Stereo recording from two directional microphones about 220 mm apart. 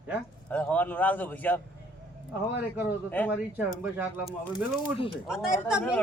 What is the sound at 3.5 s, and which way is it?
Speech, 10° right (ahead or behind).